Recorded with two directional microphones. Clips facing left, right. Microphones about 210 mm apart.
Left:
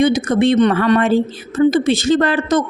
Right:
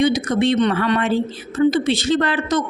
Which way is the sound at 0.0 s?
50° left (ahead or behind).